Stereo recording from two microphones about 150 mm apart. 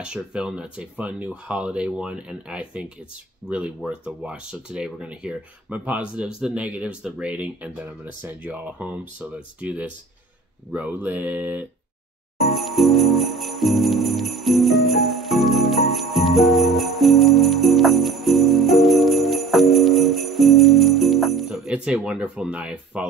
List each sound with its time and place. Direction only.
0.0 s speech: 5° right (ahead or behind)
12.4 s jingle bell: centre (ahead or behind)